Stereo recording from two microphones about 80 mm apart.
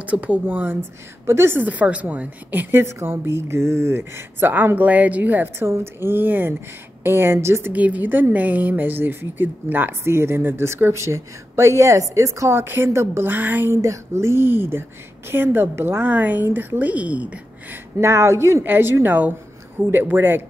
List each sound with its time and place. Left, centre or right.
0.0 s a woman's voice: centre
1.2 s a woman's voice: right
7.7 s a woman's voice: centre
13.7 s a woman's voice: right; by 17.7 s centre
18.0 s a woman's voice: right